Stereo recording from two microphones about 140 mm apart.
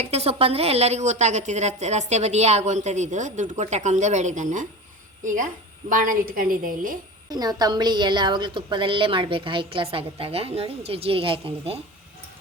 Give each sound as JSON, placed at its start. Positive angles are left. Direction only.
{"t": 0.0, "sound": "a woman's voice", "side_deg": -50}
{"t": 7.3, "sound": "a woman's voice", "side_deg": -30}